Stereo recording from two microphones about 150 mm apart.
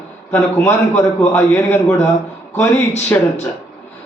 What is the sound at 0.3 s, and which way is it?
Speech, 20° left (ahead or behind).